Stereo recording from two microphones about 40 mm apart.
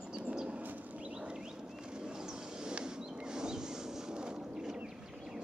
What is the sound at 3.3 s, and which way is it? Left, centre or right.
Vehicle, centre.